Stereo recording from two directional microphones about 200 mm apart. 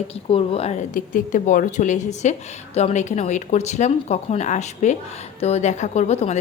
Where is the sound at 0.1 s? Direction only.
30° left (ahead or behind).